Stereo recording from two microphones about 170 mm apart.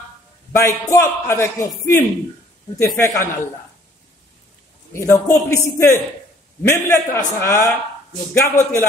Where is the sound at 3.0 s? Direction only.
15° left (ahead or behind).